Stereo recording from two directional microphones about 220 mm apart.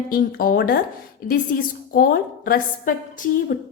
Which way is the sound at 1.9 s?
40° left (ahead or behind).